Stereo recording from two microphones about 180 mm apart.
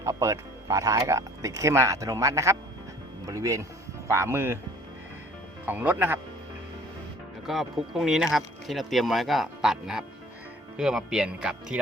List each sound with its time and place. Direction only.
0.0 s speech: 15° right (ahead or behind)
5.6 s speech: 10° right (ahead or behind)
7.4 s speech: centre (ahead or behind)